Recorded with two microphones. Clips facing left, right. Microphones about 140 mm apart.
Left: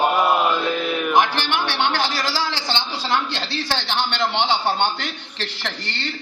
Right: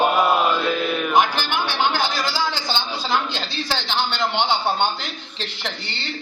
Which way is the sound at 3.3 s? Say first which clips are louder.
Left 1 dB; 70° left (ahead or behind).